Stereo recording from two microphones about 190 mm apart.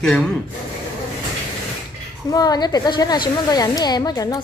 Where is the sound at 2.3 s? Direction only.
20° left (ahead or behind).